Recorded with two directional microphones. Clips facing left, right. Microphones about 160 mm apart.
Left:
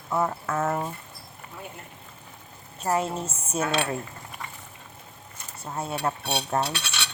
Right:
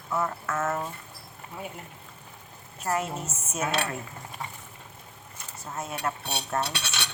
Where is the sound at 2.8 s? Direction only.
30° left (ahead or behind).